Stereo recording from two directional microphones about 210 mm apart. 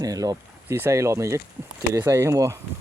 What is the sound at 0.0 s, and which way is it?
Speech, 15° right (ahead or behind).